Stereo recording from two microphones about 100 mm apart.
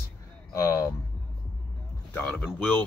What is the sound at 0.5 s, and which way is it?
Speech, 30° left (ahead or behind).